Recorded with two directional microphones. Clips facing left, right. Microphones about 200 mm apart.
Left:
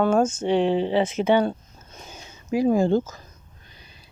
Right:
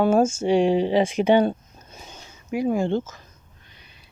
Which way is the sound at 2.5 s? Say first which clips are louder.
Left 3 dB; 35° left (ahead or behind).